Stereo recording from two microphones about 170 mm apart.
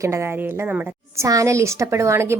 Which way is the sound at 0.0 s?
15° right (ahead or behind).